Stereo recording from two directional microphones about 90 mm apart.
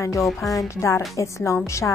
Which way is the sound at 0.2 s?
Centre (ahead or behind).